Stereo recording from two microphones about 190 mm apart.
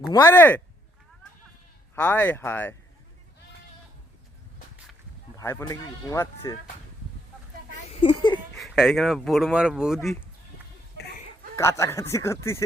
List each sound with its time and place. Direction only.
0.1 s speech: 15° left (ahead or behind)
2.0 s speech: 10° left (ahead or behind)
5.4 s speech: 15° left (ahead or behind)
8.0 s speech: 25° left (ahead or behind)
8.5 s speech: centre (ahead or behind)
11.5 s speech: 15° left (ahead or behind)